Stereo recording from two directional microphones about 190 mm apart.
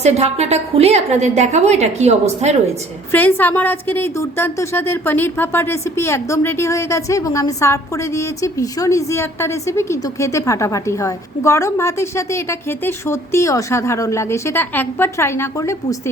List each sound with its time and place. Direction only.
0.0 s a woman's voice: 35° right (ahead or behind)
3.1 s a woman's voice: 10° left (ahead or behind)